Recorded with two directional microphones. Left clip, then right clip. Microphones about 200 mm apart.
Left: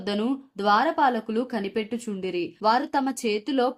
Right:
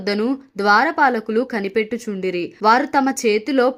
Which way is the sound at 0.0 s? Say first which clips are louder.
Right 7 dB; 15° right (ahead or behind).